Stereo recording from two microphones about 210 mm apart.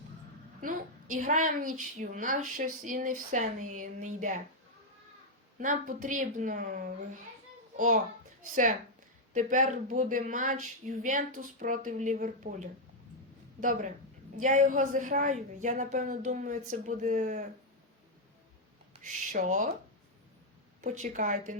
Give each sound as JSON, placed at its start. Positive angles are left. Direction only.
{"t": 0.6, "sound": "a woman's voice", "side_deg": -40}
{"t": 5.5, "sound": "a woman's voice", "side_deg": -40}
{"t": 9.3, "sound": "a woman's voice", "side_deg": -35}
{"t": 19.0, "sound": "a woman's voice", "side_deg": -35}
{"t": 20.8, "sound": "a woman's voice", "side_deg": -35}